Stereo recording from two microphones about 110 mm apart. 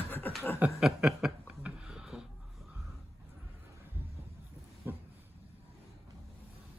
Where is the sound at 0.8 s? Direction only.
5° right (ahead or behind).